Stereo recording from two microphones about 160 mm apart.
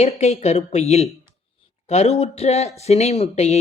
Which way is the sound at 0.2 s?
45° left (ahead or behind).